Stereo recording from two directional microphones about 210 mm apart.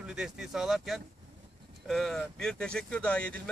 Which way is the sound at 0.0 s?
5° right (ahead or behind).